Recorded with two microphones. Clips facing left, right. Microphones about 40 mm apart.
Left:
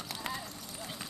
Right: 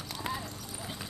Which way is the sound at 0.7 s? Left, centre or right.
Centre.